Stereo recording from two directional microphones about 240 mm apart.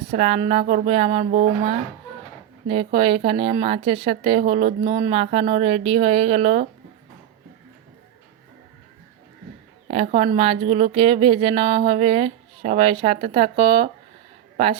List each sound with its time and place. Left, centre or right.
0.2 s speech: right
9.9 s speech: right